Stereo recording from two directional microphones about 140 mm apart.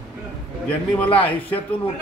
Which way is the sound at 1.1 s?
10° left (ahead or behind).